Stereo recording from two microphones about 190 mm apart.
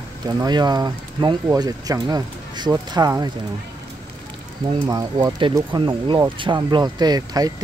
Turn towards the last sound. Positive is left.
turn(degrees=-20)  # may be behind; listen again after turning